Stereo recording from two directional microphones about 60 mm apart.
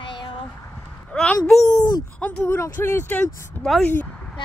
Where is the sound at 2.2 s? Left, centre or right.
Left.